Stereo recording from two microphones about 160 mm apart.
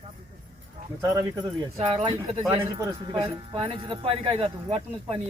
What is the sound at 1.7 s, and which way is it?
Speech, 40° right (ahead or behind).